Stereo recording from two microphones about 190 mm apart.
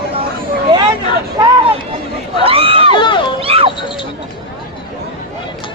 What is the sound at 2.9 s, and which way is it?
Speech, 25° left (ahead or behind).